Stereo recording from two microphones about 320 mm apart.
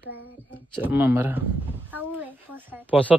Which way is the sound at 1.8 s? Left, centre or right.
Centre.